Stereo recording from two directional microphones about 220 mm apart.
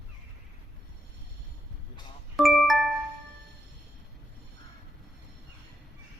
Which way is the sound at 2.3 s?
Centre (ahead or behind).